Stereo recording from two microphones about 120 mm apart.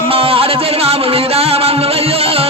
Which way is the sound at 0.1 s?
50° right (ahead or behind).